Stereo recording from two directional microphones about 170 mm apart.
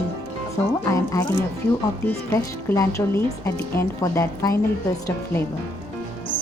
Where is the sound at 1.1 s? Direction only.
20° left (ahead or behind).